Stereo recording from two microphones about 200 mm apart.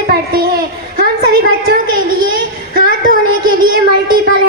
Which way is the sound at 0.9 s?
45° right (ahead or behind).